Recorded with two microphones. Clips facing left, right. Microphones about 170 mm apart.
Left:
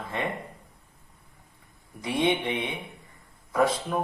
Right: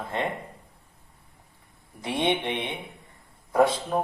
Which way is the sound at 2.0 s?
25° right (ahead or behind).